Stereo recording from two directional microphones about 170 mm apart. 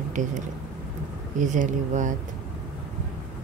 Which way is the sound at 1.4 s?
45° right (ahead or behind).